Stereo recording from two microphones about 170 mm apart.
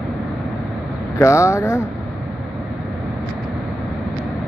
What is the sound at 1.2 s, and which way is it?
Speech, 15° left (ahead or behind).